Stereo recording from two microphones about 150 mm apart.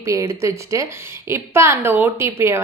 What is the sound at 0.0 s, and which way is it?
A woman's voice, 20° right (ahead or behind).